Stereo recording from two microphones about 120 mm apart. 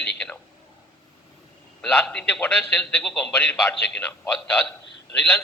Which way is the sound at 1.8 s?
5° left (ahead or behind).